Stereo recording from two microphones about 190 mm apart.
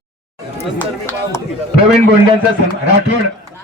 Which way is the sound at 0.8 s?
10° left (ahead or behind).